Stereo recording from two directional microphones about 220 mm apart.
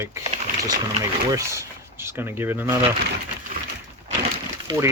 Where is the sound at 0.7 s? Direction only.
15° right (ahead or behind).